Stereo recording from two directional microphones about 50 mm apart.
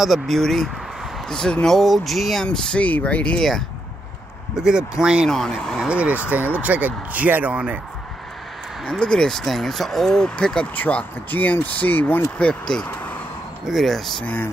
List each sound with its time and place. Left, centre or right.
0.0 s speech: centre
1.8 s speech: centre
2.4 s speech: left
3.3 s speech: centre
4.6 s speech: centre
5.9 s speech: right
9.0 s speech: centre
10.2 s speech: centre
11.2 s speech: left
12.4 s speech: left
13.7 s speech: centre